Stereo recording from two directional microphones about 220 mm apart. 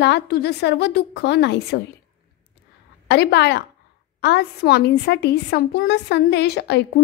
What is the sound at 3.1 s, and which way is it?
A woman's voice, 50° left (ahead or behind).